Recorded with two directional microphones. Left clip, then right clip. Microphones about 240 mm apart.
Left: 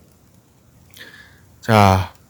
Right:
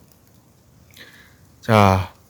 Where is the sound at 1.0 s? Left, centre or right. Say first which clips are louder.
Left 4 dB; centre.